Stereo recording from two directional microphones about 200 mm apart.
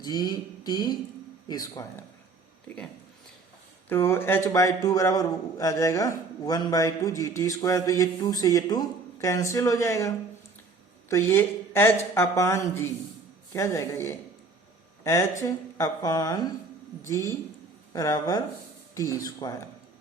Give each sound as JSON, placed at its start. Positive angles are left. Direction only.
{"t": 0.0, "sound": "a sound", "side_deg": 20}
{"t": 1.5, "sound": "a man's voice", "side_deg": 15}
{"t": 3.8, "sound": "a man's voice", "side_deg": 10}
{"t": 11.1, "sound": "a man's voice", "side_deg": 10}